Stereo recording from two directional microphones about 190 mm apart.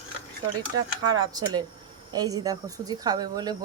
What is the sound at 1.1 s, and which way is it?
Speech, 20° right (ahead or behind).